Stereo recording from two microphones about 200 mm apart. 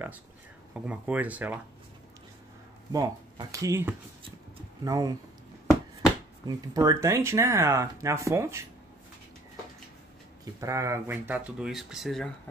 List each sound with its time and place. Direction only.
0.7 s speech: 5° right (ahead or behind)
2.9 s speech: 20° right (ahead or behind)
6.4 s speech: 20° right (ahead or behind)
10.4 s speech: 15° right (ahead or behind)